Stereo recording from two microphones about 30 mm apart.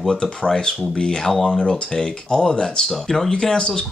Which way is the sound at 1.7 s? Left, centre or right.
Left.